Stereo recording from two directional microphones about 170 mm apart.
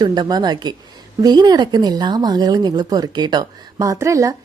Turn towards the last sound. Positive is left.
turn(degrees=-20)  # may be behind; listen again after turning